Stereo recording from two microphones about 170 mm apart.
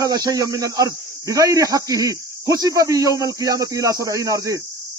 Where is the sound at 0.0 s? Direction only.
20° right (ahead or behind).